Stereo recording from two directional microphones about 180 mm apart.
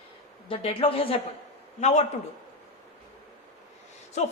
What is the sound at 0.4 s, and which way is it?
A man's voice, 30° left (ahead or behind).